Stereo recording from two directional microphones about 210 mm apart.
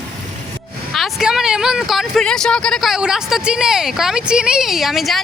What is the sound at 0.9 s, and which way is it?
Speech, centre (ahead or behind).